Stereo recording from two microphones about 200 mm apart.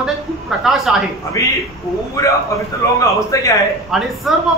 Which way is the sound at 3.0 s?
15° left (ahead or behind).